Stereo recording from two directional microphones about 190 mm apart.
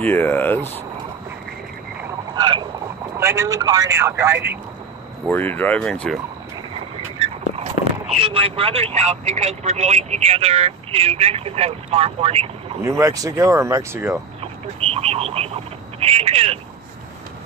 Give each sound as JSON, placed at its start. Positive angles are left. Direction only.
{"t": 0.0, "sound": "speech", "side_deg": 10}
{"t": 2.3, "sound": "frog", "side_deg": -25}
{"t": 3.2, "sound": "speech", "side_deg": -15}
{"t": 5.3, "sound": "speech", "side_deg": 10}
{"t": 8.2, "sound": "speech", "side_deg": -30}
{"t": 12.8, "sound": "speech", "side_deg": -15}
{"t": 14.4, "sound": "speech", "side_deg": -30}